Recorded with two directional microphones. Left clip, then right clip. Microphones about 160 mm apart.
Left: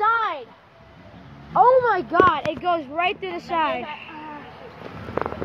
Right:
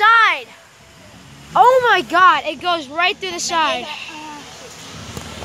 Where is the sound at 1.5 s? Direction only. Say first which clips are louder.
Right 4 dB; 45° right (ahead or behind).